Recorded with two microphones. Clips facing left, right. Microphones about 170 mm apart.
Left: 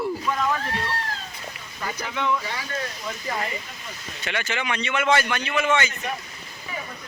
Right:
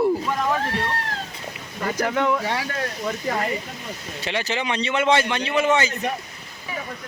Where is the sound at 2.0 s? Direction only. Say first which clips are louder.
Right 5 dB; 45° right (ahead or behind).